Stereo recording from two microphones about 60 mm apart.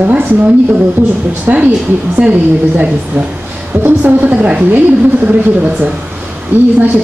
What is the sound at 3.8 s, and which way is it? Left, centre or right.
A woman's voice, right.